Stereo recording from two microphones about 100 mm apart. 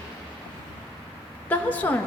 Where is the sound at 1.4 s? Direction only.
15° left (ahead or behind).